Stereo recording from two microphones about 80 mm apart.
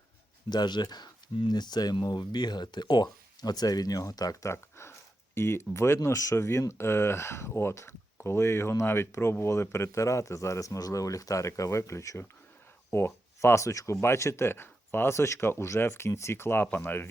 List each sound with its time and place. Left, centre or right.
0.5 s speech: left
4.4 s speech: left